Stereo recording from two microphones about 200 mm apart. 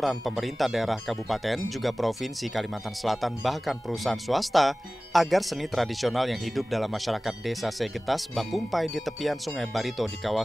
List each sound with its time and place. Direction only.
0.0 s speech: centre (ahead or behind)